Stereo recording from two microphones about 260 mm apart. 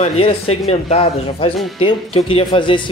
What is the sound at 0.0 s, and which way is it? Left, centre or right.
Speech, left.